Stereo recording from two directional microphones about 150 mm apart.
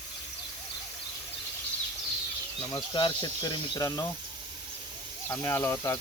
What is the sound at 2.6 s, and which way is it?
Speech, 30° left (ahead or behind).